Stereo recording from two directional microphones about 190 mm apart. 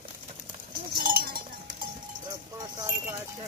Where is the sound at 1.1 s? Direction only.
50° right (ahead or behind).